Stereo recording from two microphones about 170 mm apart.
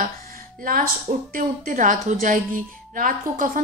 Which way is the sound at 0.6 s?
55° right (ahead or behind).